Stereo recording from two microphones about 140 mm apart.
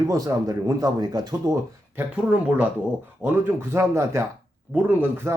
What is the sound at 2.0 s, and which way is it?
Speech, 10° right (ahead or behind).